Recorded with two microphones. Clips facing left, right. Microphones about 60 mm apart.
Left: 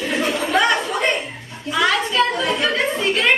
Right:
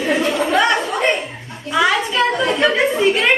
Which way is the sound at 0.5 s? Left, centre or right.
Centre.